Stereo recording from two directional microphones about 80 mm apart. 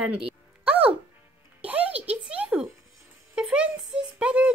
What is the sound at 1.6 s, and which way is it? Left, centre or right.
A child's voice, centre.